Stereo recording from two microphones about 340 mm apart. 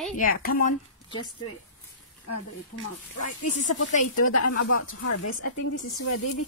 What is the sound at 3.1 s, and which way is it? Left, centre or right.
A woman's voice, left.